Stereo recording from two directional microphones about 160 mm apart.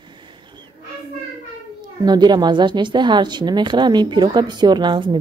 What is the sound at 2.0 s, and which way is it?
A woman's voice, 25° right (ahead or behind).